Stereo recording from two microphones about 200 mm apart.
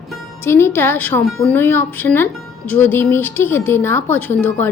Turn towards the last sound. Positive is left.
turn(degrees=10)  # may be behind; listen again after turning